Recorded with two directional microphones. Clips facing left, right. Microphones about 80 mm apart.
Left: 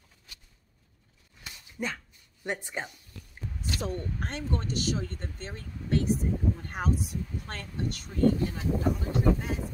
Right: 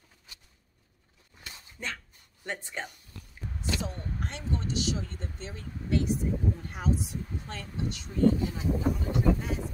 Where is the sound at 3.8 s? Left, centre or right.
Left.